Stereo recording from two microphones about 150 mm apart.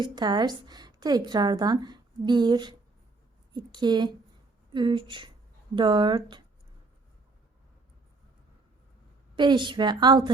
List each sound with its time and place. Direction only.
0.0 s a woman's voice: 30° right (ahead or behind)
9.3 s a woman's voice: 30° right (ahead or behind)